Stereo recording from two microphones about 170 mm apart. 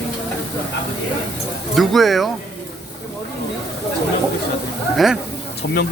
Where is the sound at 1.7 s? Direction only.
Centre (ahead or behind).